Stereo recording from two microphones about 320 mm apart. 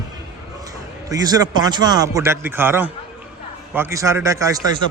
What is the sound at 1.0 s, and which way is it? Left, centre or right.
A man's voice, centre.